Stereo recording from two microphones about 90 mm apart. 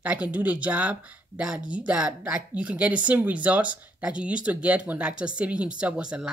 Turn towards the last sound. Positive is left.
turn(degrees=-10)  # may be behind; listen again after turning